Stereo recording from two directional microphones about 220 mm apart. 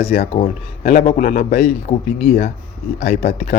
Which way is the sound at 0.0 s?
25° left (ahead or behind).